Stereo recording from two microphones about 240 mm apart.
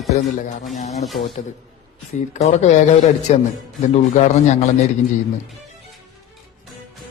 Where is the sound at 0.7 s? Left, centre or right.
Left.